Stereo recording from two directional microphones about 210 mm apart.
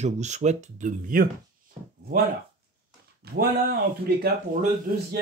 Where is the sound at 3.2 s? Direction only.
50° right (ahead or behind).